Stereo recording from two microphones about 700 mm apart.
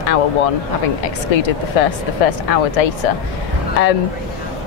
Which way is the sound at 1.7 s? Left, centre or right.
Left.